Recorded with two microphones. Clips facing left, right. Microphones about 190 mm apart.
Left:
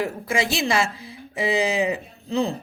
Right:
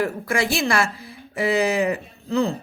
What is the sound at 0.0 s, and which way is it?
A man's voice, 15° left (ahead or behind).